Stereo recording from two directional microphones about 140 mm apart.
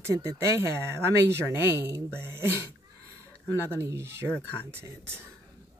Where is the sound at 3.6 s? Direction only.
20° right (ahead or behind).